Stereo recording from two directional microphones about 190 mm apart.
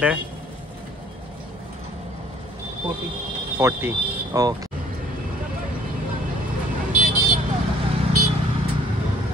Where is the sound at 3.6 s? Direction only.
15° right (ahead or behind).